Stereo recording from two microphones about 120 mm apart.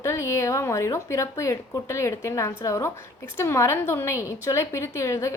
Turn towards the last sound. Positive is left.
turn(degrees=25)  # may be behind; listen again after turning